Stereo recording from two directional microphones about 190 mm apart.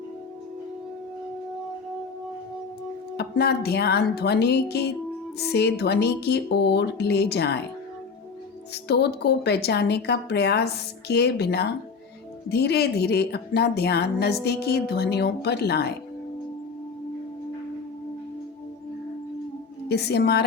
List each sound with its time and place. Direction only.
3.2 s a woman's voice: 60° left (ahead or behind)
8.7 s a woman's voice: 60° left (ahead or behind)
19.9 s a woman's voice: 60° left (ahead or behind)